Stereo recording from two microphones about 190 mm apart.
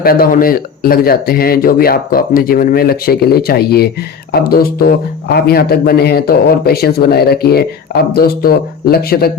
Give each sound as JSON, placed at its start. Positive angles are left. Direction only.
{"t": 0.0, "sound": "a man's voice", "side_deg": 50}